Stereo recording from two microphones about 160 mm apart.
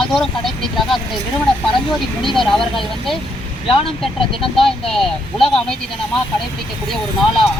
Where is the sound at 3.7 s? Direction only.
35° left (ahead or behind).